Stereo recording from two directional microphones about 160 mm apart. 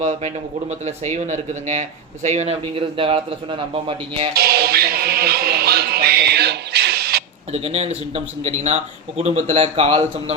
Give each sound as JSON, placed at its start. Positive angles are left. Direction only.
{"t": 0.0, "sound": "speech", "side_deg": -45}
{"t": 4.4, "sound": "music", "side_deg": -75}
{"t": 7.5, "sound": "speech", "side_deg": -40}